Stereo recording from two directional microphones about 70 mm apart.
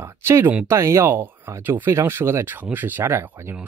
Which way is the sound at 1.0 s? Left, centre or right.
Right.